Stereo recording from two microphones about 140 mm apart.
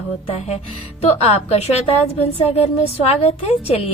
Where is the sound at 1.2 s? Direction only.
50° left (ahead or behind).